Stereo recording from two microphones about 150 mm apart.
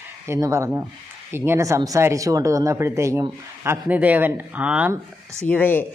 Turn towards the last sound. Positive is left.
turn(degrees=10)  # may be behind; listen again after turning